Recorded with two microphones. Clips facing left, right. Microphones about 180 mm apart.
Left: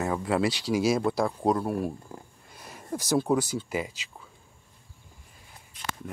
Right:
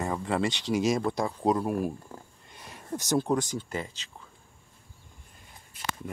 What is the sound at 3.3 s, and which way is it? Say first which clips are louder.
Speech: left 2 dB; 5° left (ahead or behind).